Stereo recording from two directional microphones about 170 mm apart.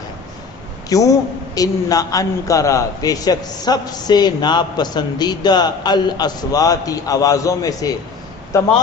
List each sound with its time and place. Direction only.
0.9 s a man's voice: 20° left (ahead or behind)